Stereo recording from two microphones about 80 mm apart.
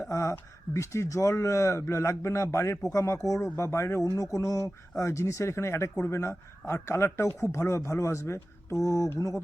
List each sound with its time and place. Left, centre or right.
0.0 s speech: left